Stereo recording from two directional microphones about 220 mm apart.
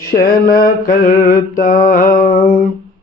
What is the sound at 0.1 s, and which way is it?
Mantra, 40° left (ahead or behind).